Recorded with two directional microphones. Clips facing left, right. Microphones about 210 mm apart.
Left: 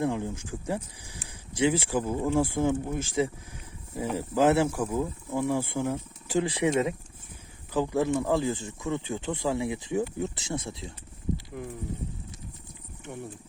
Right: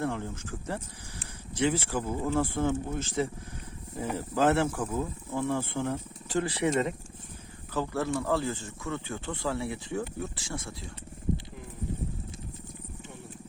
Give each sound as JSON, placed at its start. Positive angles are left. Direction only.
{"t": 0.0, "sound": "speech", "side_deg": 15}
{"t": 7.7, "sound": "speech", "side_deg": 15}